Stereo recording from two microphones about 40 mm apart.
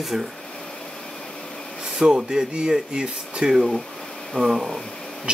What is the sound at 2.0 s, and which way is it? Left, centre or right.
Speech, centre.